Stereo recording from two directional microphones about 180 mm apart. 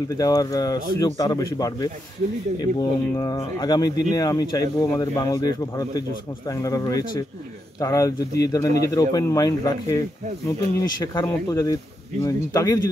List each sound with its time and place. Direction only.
0.2 s speech: 20° left (ahead or behind)